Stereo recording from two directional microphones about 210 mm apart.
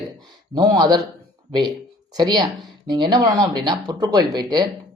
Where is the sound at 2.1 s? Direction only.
20° right (ahead or behind).